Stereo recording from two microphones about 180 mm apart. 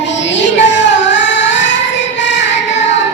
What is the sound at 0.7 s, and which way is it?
Singing, 90° left.